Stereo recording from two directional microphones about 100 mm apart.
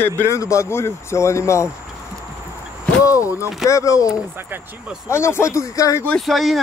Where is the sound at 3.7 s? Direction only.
30° left (ahead or behind).